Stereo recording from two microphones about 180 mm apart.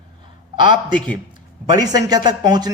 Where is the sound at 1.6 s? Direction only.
20° right (ahead or behind).